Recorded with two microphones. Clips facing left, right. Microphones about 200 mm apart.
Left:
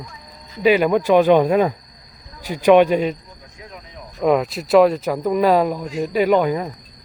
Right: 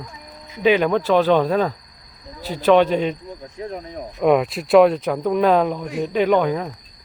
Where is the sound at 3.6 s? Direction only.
40° right (ahead or behind).